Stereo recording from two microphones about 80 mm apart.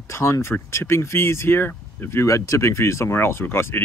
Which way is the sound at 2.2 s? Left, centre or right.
Left.